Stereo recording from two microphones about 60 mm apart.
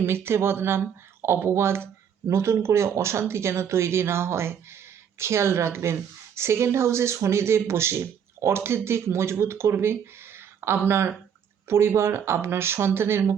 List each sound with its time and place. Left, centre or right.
0.0 s speech: right